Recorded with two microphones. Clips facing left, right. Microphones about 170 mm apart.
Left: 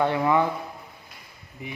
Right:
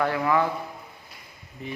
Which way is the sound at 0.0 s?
25° left (ahead or behind).